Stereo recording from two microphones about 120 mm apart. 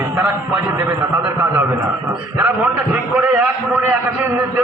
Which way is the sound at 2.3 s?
15° right (ahead or behind).